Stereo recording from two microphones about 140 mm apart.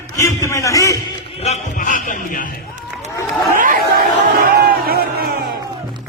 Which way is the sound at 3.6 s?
85° right.